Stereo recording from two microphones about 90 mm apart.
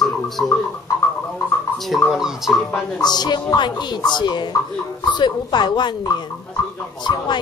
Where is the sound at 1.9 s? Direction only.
5° right (ahead or behind).